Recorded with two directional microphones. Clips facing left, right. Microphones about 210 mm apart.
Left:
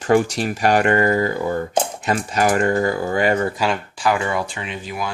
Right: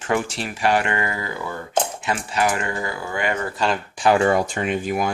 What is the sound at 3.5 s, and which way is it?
Speech, 5° left (ahead or behind).